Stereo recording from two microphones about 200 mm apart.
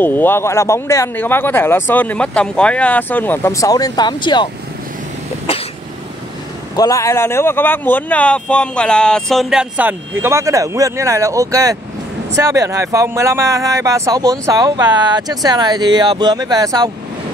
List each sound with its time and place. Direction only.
0.0 s speech: 10° left (ahead or behind)
5.5 s cough: 30° left (ahead or behind)
6.8 s speech: 15° left (ahead or behind); by 16.9 s 20° right (ahead or behind)